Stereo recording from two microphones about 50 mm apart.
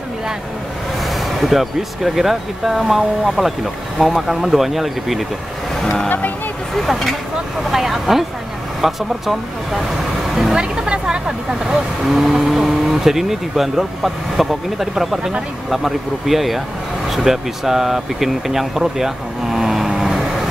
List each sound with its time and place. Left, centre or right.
1.0 s speech: centre
6.0 s speech: left
6.7 s speech: centre
10.5 s speech: centre
19.9 s vehicle: centre